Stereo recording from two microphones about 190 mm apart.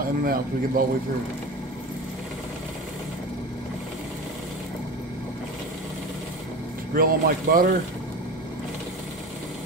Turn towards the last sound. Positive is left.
turn(degrees=-50)  # may be behind; listen again after turning